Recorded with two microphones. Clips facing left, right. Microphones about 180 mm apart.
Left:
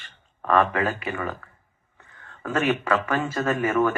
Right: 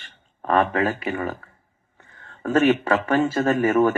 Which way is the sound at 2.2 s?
25° right (ahead or behind).